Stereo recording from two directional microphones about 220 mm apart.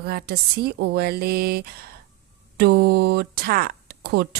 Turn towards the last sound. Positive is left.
turn(degrees=-45)  # may be behind; listen again after turning